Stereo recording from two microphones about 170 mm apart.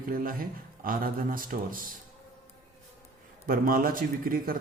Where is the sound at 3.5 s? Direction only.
60° right (ahead or behind).